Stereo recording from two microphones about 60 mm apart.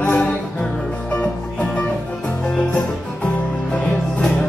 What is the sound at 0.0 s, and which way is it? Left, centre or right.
Music, left.